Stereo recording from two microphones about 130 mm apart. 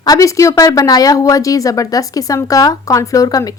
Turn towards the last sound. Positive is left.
turn(degrees=30)  # may be behind; listen again after turning